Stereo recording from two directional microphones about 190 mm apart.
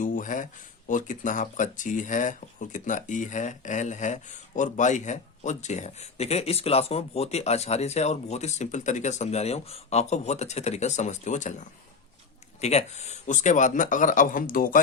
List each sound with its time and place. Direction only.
0.0 s a sound: 45° left (ahead or behind)
0.9 s speech: 45° left (ahead or behind)
12.5 s speech: 35° left (ahead or behind)